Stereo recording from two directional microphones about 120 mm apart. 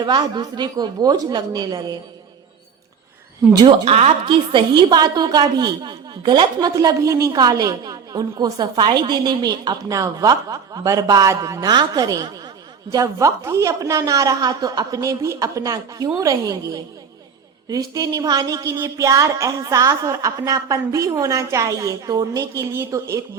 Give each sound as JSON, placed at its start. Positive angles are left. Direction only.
{"t": 0.0, "sound": "a woman's voice", "side_deg": -40}
{"t": 3.5, "sound": "a woman's voice", "side_deg": -35}
{"t": 3.8, "sound": "a woman's voice", "side_deg": -55}
{"t": 4.5, "sound": "a woman's voice", "side_deg": -40}